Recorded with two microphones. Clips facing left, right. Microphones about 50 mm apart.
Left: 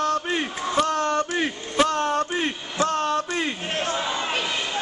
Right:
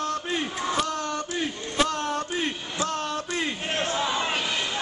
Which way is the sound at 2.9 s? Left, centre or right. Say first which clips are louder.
Left 6 dB; left.